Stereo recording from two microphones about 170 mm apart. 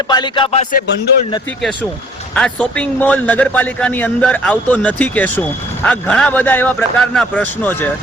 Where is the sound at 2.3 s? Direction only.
5° left (ahead or behind).